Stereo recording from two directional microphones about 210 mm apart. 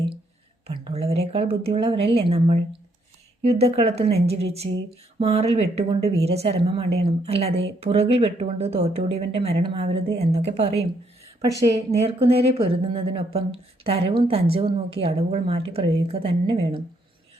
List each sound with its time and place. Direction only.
0.7 s speech: 25° right (ahead or behind)
11.9 s speech: 30° right (ahead or behind)